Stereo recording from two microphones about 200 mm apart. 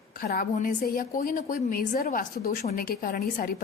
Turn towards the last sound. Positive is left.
turn(degrees=45)  # may be behind; listen again after turning